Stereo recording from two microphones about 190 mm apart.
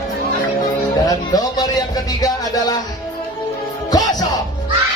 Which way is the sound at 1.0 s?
20° left (ahead or behind).